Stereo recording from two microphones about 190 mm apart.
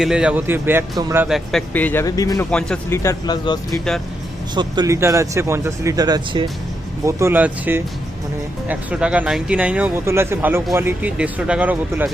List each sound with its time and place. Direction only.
0.0 s speech: 5° right (ahead or behind)
1.3 s speech: 5° left (ahead or behind)
2.5 s speech: 5° left (ahead or behind)
3.7 s speech: centre (ahead or behind)
4.5 s speech: 20° right (ahead or behind)